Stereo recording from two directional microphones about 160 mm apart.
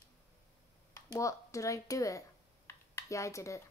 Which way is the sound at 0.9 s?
20° left (ahead or behind).